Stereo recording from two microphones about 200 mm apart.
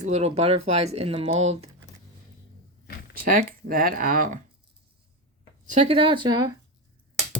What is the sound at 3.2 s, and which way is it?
Speech, 45° right (ahead or behind).